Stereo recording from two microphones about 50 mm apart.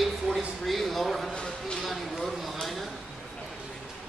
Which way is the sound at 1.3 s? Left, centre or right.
Centre.